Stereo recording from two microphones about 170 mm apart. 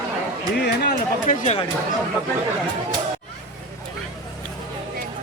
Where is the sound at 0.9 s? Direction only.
45° left (ahead or behind).